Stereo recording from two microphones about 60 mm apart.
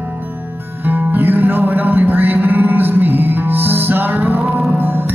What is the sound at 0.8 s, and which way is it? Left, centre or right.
Music, right.